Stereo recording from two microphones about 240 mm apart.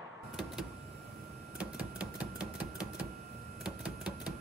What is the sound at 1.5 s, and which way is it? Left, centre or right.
Typewriter, centre.